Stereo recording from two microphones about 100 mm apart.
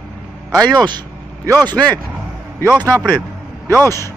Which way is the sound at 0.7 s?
45° right (ahead or behind).